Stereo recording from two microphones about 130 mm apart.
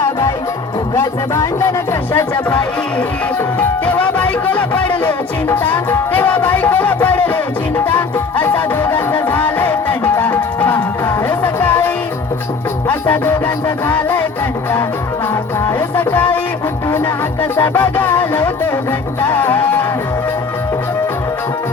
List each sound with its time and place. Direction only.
0.0 s music: 25° left (ahead or behind)
0.9 s speech: 20° left (ahead or behind)
3.6 s music: 10° left (ahead or behind)
12.9 s music: 15° left (ahead or behind)
17.6 s music: 20° left (ahead or behind)